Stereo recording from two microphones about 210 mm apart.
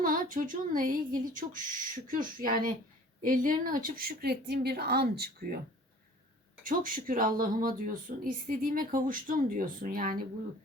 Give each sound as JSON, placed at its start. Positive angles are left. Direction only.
{"t": 0.0, "sound": "a woman's voice", "side_deg": -40}
{"t": 6.7, "sound": "speech", "side_deg": -40}